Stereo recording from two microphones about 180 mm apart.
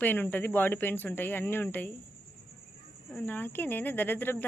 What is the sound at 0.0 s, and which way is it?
Speech, 10° left (ahead or behind).